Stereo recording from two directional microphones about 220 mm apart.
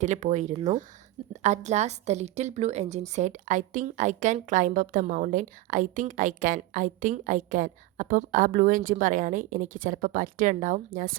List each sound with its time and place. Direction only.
0.0 s a woman's voice: 35° right (ahead or behind)